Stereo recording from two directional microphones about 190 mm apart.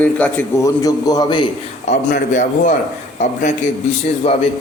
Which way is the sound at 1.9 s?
40° left (ahead or behind).